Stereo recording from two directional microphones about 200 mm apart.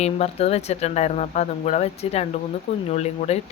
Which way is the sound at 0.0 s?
30° left (ahead or behind).